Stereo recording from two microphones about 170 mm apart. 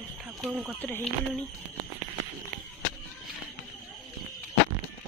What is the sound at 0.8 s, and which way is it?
Speech, 10° left (ahead or behind).